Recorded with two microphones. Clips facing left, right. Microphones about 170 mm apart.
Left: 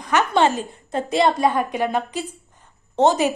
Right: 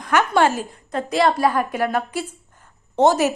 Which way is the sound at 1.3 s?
20° left (ahead or behind).